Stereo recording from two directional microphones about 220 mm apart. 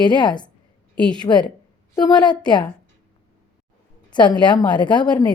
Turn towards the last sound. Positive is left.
turn(degrees=20)  # may be behind; listen again after turning